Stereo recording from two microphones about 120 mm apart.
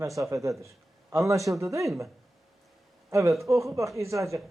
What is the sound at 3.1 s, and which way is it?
Speech, 25° right (ahead or behind).